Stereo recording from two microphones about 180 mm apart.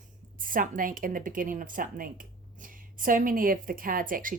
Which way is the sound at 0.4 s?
50° right (ahead or behind).